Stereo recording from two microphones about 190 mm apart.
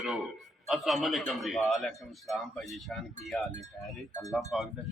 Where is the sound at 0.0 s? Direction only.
Centre (ahead or behind).